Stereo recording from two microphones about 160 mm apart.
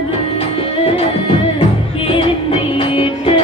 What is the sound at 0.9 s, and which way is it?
Music, 35° left (ahead or behind).